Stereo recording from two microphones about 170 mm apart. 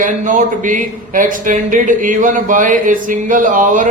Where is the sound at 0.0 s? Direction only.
50° right (ahead or behind).